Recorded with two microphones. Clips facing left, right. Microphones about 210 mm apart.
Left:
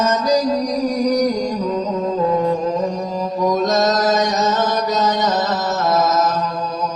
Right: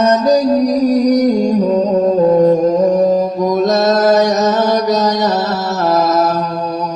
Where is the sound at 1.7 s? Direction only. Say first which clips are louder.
Right 8 dB; 35° right (ahead or behind).